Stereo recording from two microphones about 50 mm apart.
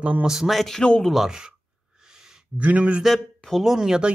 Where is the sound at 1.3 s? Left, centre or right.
Centre.